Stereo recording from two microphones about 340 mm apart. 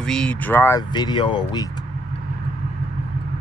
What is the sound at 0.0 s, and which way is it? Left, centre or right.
Speech, centre.